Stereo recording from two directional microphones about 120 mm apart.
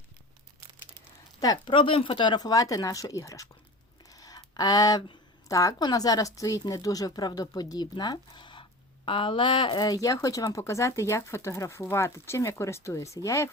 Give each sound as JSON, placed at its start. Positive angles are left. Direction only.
{"t": 1.4, "sound": "speech", "side_deg": 30}
{"t": 1.7, "sound": "speech", "side_deg": 45}